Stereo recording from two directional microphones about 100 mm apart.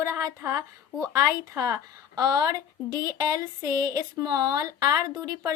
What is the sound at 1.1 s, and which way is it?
A woman's voice, 35° right (ahead or behind).